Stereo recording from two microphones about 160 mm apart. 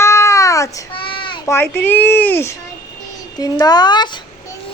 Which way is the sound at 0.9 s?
30° left (ahead or behind).